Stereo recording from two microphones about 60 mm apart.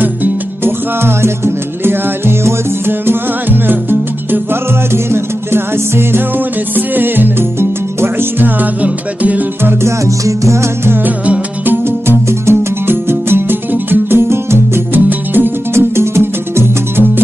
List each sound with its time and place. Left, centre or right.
0.0 s music: right
8.8 s music: right
9.8 s music: right
11.1 s music: right
14.9 s music: right